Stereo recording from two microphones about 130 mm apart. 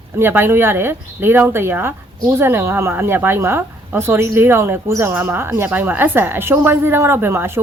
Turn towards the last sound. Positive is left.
turn(degrees=-15)  # may be behind; listen again after turning